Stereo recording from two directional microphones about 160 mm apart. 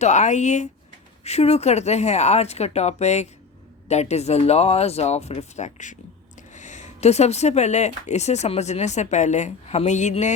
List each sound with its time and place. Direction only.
0.0 s speech: 45° left (ahead or behind)